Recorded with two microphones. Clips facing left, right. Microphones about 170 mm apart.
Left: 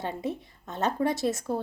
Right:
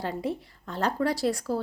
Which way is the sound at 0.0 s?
20° left (ahead or behind).